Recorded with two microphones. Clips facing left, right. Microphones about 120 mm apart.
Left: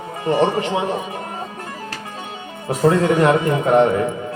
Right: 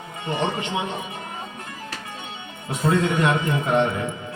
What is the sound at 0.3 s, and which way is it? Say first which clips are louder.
Speech: left 8 dB; 35° left (ahead or behind).